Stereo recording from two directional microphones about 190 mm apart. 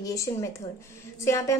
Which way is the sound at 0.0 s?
15° left (ahead or behind).